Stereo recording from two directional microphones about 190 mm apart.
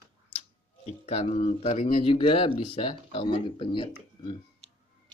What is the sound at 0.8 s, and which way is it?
Speech, 35° left (ahead or behind).